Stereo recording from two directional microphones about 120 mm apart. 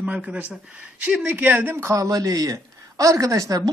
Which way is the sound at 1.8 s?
30° right (ahead or behind).